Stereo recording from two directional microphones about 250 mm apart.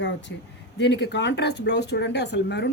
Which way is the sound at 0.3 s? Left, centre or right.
Left.